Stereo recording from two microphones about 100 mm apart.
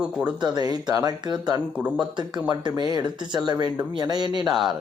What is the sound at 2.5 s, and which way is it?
Speech, 45° right (ahead or behind).